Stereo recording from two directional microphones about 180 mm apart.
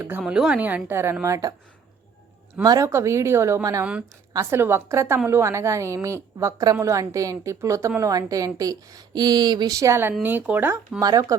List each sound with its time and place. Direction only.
0.0 s a woman's voice: 10° right (ahead or behind)
2.6 s a woman's voice: 15° right (ahead or behind)